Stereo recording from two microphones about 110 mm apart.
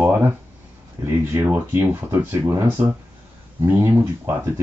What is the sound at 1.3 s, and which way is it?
Speech, 20° right (ahead or behind).